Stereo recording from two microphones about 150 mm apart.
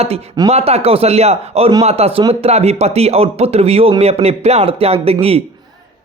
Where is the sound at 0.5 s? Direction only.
45° right (ahead or behind).